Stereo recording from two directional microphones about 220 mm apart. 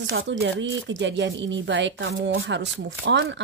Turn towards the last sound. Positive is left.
turn(degrees=-55)  # may be behind; listen again after turning